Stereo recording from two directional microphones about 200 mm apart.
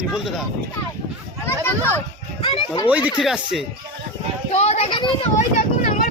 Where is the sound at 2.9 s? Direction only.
5° right (ahead or behind).